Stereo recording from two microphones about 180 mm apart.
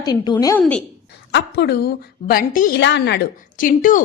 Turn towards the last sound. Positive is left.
turn(degrees=50)  # may be behind; listen again after turning